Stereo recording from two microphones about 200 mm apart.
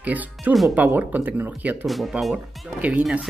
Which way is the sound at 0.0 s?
10° right (ahead or behind).